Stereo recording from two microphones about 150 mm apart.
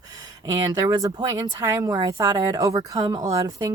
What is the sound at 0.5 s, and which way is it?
Speech, 20° right (ahead or behind).